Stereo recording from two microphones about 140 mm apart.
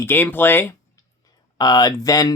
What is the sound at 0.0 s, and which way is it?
Speech, 15° left (ahead or behind).